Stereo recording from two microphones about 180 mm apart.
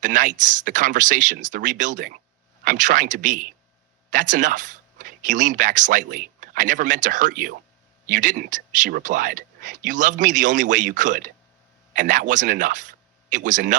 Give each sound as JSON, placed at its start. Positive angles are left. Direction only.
{"t": 0.0, "sound": "speech", "side_deg": -45}